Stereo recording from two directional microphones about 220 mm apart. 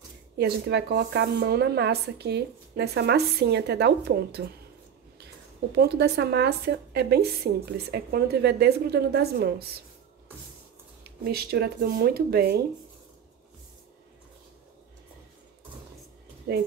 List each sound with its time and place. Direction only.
0.4 s speech: 50° right (ahead or behind)
5.8 s speech: 50° right (ahead or behind)
11.1 s speech: 45° right (ahead or behind)
16.5 s speech: 50° right (ahead or behind)